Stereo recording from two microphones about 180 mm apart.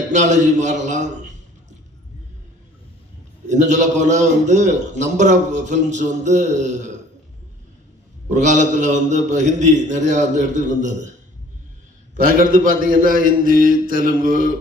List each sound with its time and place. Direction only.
0.1 s a man's voice: 40° right (ahead or behind)
3.4 s a man's voice: 40° right (ahead or behind)
8.3 s a man's voice: 45° right (ahead or behind)
12.4 s a man's voice: 50° right (ahead or behind)